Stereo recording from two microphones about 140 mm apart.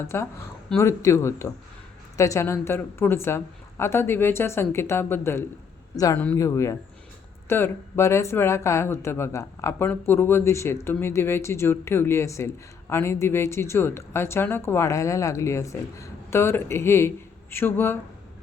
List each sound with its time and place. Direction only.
0.1 s a woman's voice: 15° left (ahead or behind)